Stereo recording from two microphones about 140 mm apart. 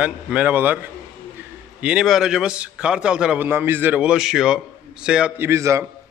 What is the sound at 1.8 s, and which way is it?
A man's voice, 5° right (ahead or behind).